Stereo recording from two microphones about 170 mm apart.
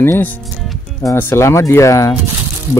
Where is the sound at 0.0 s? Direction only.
15° left (ahead or behind).